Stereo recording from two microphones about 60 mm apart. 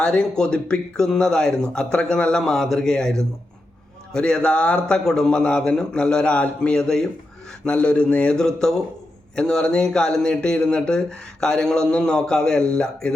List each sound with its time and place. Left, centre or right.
0.0 s speech: centre